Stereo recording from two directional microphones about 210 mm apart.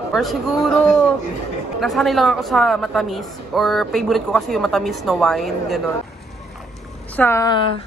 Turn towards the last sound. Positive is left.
turn(degrees=20)  # may be behind; listen again after turning